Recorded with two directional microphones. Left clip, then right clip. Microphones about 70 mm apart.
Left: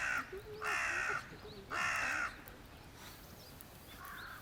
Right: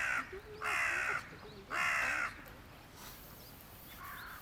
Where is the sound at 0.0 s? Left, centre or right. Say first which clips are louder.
Right 2 dB; right.